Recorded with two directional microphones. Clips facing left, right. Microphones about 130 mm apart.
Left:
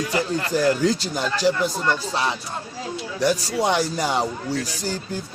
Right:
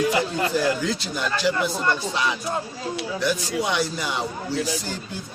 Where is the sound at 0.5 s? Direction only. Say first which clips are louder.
Left 7 dB; 40° left (ahead or behind).